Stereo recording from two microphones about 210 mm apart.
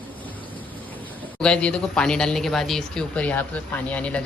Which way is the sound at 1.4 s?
5° left (ahead or behind).